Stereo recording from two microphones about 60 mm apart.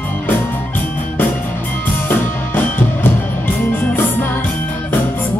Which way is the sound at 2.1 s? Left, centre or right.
Left.